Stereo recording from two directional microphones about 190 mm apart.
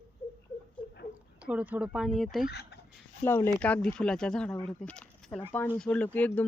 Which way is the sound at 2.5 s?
60° left (ahead or behind).